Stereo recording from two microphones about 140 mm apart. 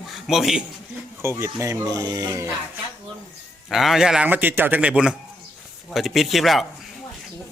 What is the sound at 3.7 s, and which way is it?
Speech, centre (ahead or behind).